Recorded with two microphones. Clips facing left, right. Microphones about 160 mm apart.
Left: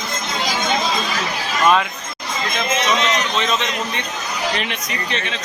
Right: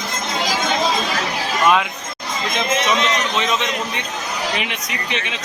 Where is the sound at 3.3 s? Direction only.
10° right (ahead or behind).